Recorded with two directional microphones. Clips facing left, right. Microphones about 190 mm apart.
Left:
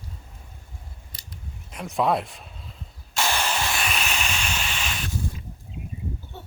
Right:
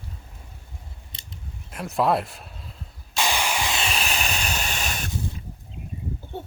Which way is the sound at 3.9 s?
35° right (ahead or behind).